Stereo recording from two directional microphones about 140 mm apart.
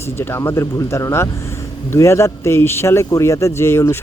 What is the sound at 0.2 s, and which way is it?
Speech, 15° left (ahead or behind).